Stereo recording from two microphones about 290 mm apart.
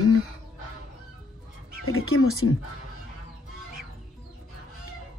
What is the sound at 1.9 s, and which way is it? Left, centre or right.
Speech, left.